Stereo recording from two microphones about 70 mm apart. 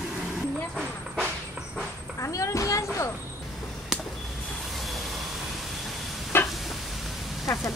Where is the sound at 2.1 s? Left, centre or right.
Left.